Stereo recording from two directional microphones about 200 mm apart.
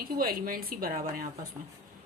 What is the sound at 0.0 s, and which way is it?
Speech, 45° right (ahead or behind).